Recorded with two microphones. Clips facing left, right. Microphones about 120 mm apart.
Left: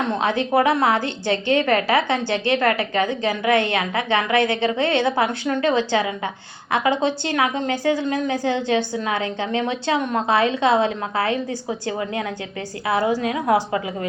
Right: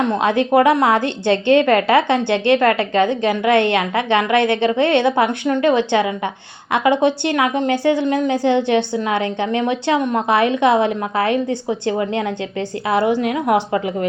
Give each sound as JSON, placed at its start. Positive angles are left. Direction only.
{"t": 0.1, "sound": "a woman's voice", "side_deg": -20}